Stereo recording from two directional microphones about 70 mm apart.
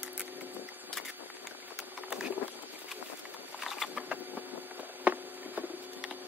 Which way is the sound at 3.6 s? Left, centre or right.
Centre.